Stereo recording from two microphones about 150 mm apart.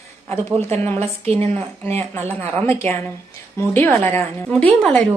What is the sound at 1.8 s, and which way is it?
A woman's voice, 15° left (ahead or behind).